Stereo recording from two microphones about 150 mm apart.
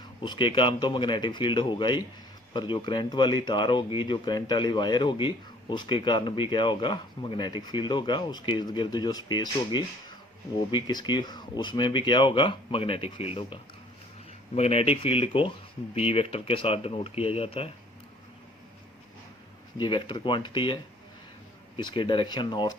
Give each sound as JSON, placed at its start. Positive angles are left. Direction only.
{"t": 0.2, "sound": "speech", "side_deg": 35}
{"t": 19.8, "sound": "speech", "side_deg": 30}
{"t": 21.8, "sound": "speech", "side_deg": 30}